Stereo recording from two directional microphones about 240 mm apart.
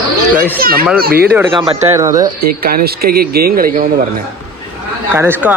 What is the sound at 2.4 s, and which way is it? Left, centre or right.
Speech, right.